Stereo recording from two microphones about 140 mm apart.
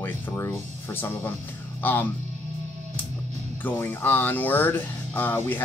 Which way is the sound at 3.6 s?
15° left (ahead or behind).